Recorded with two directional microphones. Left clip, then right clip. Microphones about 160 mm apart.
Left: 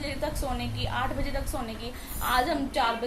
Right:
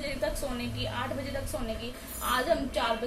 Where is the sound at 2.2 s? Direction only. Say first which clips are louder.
Left 2 dB; 20° left (ahead or behind).